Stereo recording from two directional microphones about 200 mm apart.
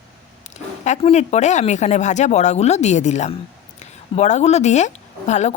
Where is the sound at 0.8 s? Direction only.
35° left (ahead or behind).